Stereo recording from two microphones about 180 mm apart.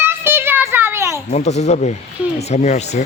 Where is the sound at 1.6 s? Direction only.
40° left (ahead or behind).